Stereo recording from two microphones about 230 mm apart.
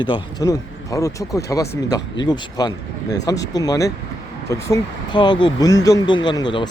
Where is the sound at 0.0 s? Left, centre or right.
Centre.